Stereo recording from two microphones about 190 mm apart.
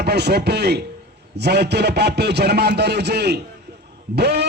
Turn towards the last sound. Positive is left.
turn(degrees=-60)  # may be behind; listen again after turning